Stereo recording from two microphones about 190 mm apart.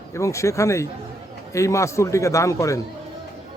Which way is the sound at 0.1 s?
15° left (ahead or behind).